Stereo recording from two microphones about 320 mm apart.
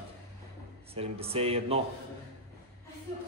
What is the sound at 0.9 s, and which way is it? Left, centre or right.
Speech, centre.